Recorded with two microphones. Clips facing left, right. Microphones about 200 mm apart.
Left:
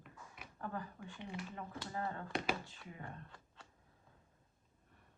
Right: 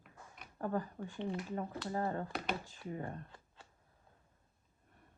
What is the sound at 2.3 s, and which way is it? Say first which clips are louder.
Speech: left 1 dB; centre (ahead or behind).